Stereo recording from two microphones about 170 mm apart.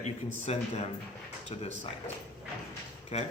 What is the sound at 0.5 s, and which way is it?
Speech, 40° left (ahead or behind).